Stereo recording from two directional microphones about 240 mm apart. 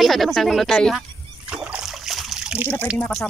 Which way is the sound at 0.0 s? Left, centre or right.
Centre.